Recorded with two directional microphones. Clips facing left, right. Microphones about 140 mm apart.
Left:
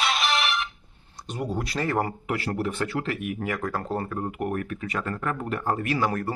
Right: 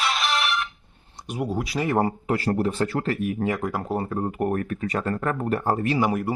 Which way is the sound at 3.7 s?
10° right (ahead or behind).